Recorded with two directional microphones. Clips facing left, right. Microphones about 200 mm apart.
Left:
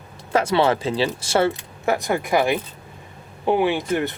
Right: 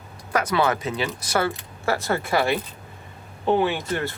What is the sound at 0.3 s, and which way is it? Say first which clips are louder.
Speech: left 4 dB; 25° left (ahead or behind).